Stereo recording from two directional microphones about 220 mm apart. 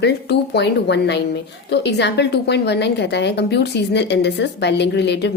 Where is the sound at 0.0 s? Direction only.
50° left (ahead or behind).